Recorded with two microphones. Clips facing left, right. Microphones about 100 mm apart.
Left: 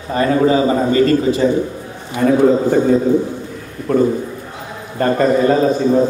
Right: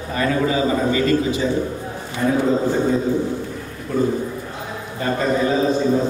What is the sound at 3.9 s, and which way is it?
A man's voice, 55° left (ahead or behind).